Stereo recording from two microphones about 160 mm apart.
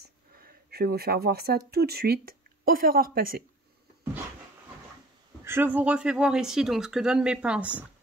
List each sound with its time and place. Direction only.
0.4 s speech: 80° right; by 3.4 s 65° right (ahead or behind)
5.4 s speech: 15° right (ahead or behind)